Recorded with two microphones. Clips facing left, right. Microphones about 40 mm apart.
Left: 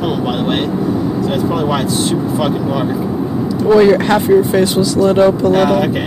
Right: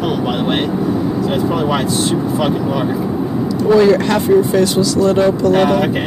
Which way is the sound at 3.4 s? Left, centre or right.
Centre.